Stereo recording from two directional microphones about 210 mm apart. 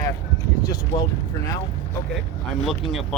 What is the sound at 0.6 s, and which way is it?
Speech, 15° left (ahead or behind).